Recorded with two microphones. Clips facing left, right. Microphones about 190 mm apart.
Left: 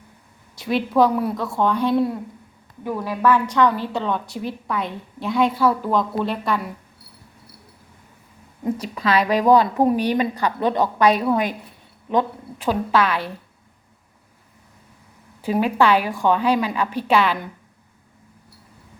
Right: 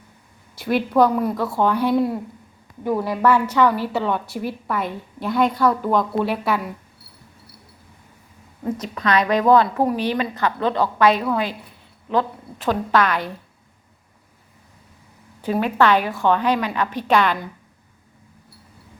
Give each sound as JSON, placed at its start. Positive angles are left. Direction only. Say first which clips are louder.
{"t": 0.5, "sound": "a woman's voice", "louder": "right 1 dB", "side_deg": 0}
{"t": 8.8, "sound": "a woman's voice", "louder": "right 1 dB", "side_deg": 10}
{"t": 15.4, "sound": "a woman's voice", "louder": "even", "side_deg": 10}